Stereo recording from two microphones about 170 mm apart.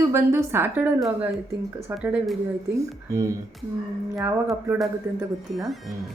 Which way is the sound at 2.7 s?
20° right (ahead or behind).